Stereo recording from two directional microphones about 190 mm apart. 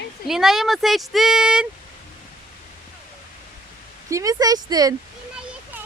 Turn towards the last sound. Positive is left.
turn(degrees=-20)  # may be behind; listen again after turning